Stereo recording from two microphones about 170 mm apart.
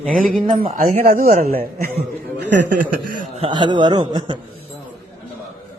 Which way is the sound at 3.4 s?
25° right (ahead or behind).